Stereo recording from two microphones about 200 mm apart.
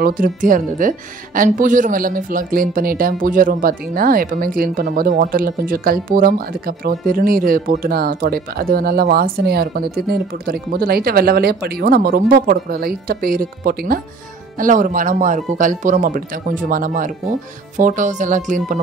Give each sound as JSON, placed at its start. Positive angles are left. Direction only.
{"t": 0.0, "sound": "speech", "side_deg": -45}